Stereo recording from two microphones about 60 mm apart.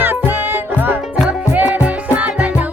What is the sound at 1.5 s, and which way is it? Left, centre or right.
Music, right.